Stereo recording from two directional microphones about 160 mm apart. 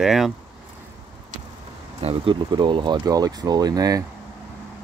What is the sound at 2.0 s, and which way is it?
Speech, 35° right (ahead or behind).